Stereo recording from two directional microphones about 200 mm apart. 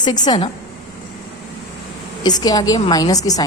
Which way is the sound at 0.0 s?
20° left (ahead or behind).